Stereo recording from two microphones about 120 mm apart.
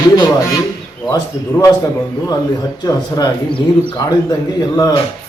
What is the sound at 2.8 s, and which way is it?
Speech, 35° left (ahead or behind).